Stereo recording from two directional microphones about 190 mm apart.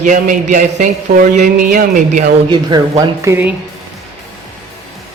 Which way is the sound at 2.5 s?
20° right (ahead or behind).